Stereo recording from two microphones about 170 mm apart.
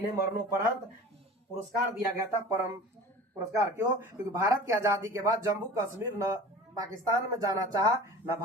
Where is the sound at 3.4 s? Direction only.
20° right (ahead or behind).